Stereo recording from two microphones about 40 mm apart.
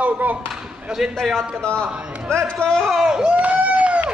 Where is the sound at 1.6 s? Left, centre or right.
Left.